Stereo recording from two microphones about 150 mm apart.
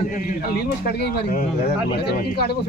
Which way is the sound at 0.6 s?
90° left.